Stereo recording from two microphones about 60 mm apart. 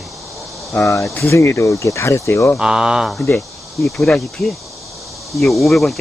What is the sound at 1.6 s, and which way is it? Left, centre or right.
Speech, left.